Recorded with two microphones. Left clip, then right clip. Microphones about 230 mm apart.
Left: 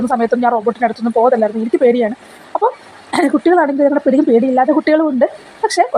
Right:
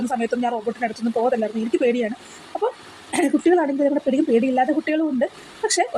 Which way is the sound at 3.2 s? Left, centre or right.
Centre.